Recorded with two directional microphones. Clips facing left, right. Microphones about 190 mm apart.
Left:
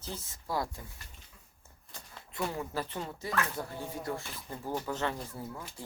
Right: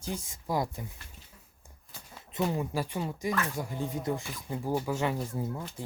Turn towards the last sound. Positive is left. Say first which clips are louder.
# right 6 dB
turn(degrees=-15)  # may be behind; listen again after turning